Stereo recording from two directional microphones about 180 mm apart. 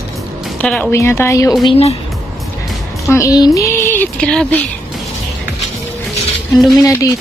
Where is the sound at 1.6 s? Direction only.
35° left (ahead or behind).